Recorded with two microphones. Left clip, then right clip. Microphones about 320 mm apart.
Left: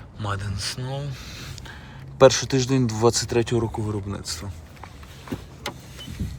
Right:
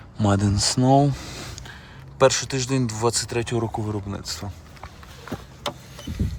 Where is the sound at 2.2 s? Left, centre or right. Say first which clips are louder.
Left 3 dB; centre.